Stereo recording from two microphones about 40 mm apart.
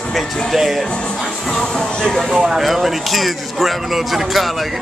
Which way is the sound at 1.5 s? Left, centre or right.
Centre.